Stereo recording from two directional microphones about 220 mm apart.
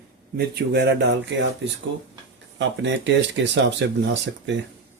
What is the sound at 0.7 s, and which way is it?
Speech, 50° right (ahead or behind).